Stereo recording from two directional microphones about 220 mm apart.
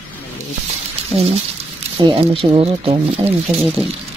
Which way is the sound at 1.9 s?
25° right (ahead or behind).